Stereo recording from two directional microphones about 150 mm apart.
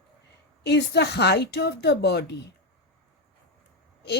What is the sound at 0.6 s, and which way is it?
Speech, 90° left.